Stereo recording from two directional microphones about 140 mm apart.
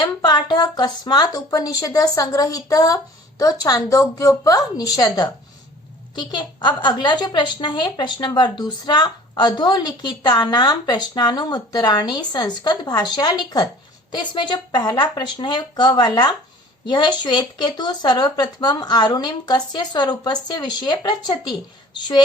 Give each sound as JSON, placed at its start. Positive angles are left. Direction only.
{"t": 0.0, "sound": "a woman's voice", "side_deg": 30}